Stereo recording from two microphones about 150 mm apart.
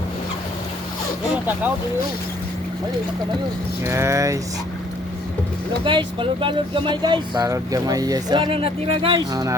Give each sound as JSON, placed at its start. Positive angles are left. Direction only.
{"t": 3.8, "sound": "speech", "side_deg": -20}
{"t": 5.8, "sound": "speech", "side_deg": -35}
{"t": 9.3, "sound": "speech", "side_deg": -25}